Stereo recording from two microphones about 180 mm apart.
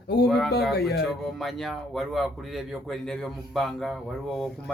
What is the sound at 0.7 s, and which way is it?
Speech, 60° left (ahead or behind).